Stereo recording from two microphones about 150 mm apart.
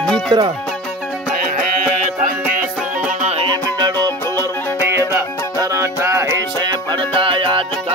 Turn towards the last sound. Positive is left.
turn(degrees=-35)  # may be behind; listen again after turning